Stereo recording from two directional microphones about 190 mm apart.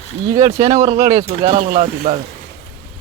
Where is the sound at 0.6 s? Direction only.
35° right (ahead or behind).